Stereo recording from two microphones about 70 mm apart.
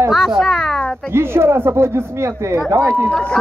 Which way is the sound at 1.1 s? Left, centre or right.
Right.